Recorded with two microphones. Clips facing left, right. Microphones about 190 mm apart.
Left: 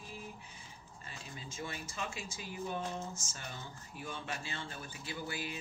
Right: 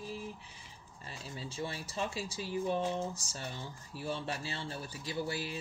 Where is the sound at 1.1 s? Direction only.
35° right (ahead or behind).